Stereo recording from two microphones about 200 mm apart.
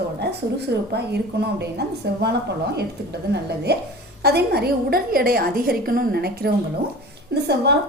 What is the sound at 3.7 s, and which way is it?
A woman's voice, 55° right (ahead or behind).